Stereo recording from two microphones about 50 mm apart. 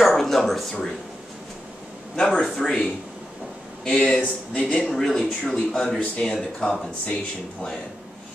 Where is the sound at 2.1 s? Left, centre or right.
Centre.